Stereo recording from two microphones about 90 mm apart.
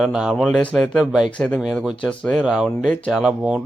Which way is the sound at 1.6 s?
5° right (ahead or behind).